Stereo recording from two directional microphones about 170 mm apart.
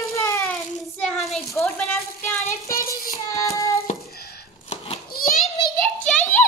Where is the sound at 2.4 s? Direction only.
15° left (ahead or behind).